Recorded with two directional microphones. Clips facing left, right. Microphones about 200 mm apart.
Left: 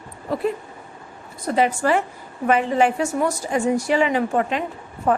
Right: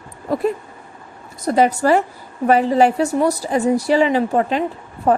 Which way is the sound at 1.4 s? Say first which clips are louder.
Right 4 dB; 40° right (ahead or behind).